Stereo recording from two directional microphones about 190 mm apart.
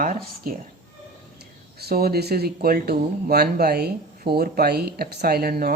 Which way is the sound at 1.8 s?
55° right (ahead or behind).